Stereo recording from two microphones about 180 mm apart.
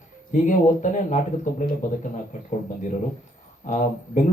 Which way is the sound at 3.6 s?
45° left (ahead or behind).